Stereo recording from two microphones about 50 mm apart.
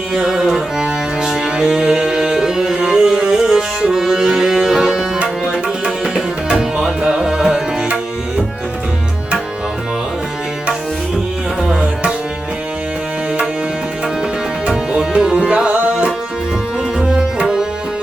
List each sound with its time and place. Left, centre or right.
0.1 s music: centre
5.2 s tabla: right
11.7 s tabla: right
14.7 s tabla: centre
17.0 s music: centre